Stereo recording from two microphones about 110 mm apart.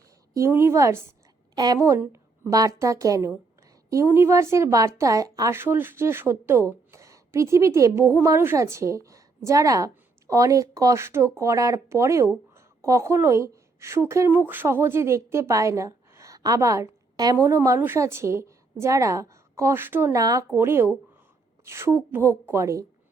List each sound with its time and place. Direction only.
0.3 s a woman's voice: 25° right (ahead or behind)
20.1 s a woman's voice: 30° right (ahead or behind)